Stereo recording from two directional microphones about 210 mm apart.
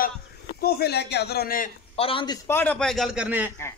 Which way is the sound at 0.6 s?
50° left (ahead or behind).